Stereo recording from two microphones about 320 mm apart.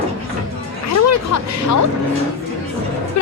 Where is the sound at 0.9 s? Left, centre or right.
Left.